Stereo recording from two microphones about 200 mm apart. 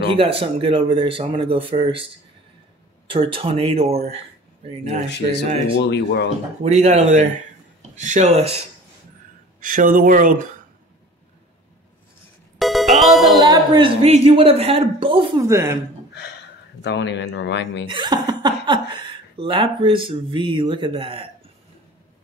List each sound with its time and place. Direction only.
0.1 s speech: 25° right (ahead or behind)
3.1 s speech: 25° right (ahead or behind)
5.8 s speech: 55° left (ahead or behind)
6.6 s speech: 35° right (ahead or behind)
9.6 s speech: 40° right (ahead or behind)
12.5 s music: centre (ahead or behind)
13.4 s speech: 20° right (ahead or behind)
15.4 s speech: 15° right (ahead or behind)
16.8 s speech: 60° left (ahead or behind)
17.8 s speech: 25° right (ahead or behind)